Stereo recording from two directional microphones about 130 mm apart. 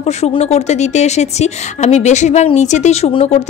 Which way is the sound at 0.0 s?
60° left (ahead or behind).